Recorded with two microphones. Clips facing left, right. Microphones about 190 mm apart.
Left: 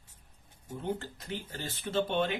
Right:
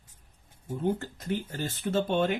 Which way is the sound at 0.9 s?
45° right (ahead or behind).